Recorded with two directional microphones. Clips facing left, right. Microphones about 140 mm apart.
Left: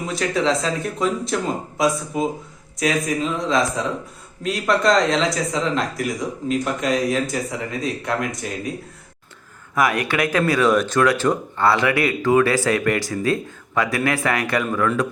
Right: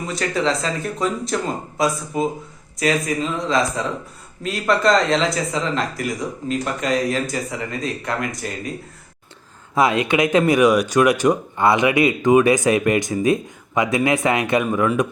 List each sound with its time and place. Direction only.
0.0 s speech: centre (ahead or behind)
9.7 s speech: 25° right (ahead or behind)